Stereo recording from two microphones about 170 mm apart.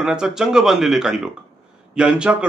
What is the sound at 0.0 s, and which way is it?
A man's voice, 5° right (ahead or behind).